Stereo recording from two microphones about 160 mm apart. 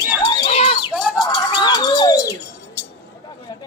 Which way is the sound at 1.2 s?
25° left (ahead or behind).